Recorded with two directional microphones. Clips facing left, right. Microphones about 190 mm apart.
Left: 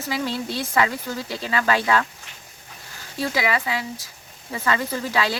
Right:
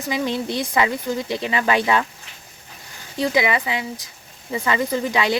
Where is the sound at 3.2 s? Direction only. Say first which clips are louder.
Right 4 dB; 20° right (ahead or behind).